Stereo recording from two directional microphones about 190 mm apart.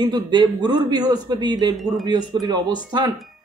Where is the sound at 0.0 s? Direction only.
25° right (ahead or behind).